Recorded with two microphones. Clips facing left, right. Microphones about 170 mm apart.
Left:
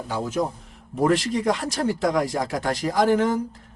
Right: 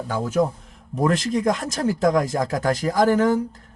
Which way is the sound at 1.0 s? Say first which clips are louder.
Even; 45° right (ahead or behind).